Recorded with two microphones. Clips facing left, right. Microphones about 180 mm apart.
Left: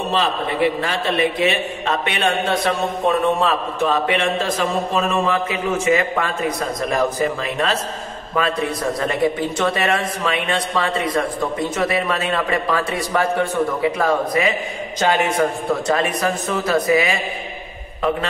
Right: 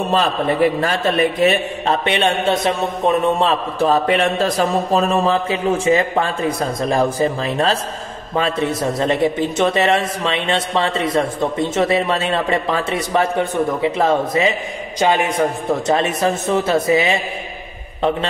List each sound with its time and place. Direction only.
0.1 s a man's voice: 45° right (ahead or behind); by 17.2 s 25° right (ahead or behind)